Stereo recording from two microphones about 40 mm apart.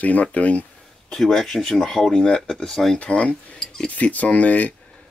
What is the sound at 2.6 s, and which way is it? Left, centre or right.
Speech, centre.